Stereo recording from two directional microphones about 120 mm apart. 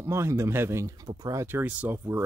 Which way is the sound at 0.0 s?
25° right (ahead or behind).